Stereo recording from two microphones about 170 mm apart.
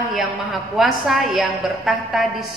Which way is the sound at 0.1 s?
Centre (ahead or behind).